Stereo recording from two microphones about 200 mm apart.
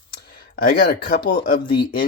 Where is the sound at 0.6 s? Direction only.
45° left (ahead or behind).